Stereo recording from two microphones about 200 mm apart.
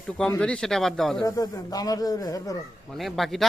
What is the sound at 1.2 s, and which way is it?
Speech, 15° left (ahead or behind).